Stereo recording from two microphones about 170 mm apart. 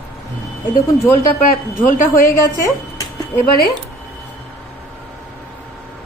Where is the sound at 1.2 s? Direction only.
55° left (ahead or behind).